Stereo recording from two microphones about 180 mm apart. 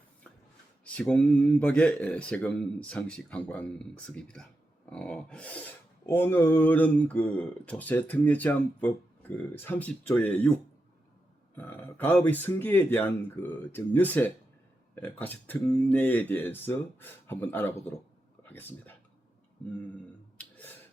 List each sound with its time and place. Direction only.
0.9 s filing: 5° left (ahead or behind)
11.5 s filing: 10° left (ahead or behind)
18.4 s speech: 10° left (ahead or behind)
20.4 s a sound: 10° left (ahead or behind)